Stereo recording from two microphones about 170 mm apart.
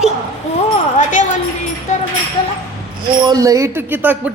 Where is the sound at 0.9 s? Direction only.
45° left (ahead or behind).